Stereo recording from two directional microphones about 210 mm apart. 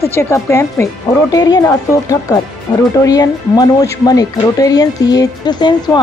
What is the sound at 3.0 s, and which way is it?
A woman's voice, 15° left (ahead or behind).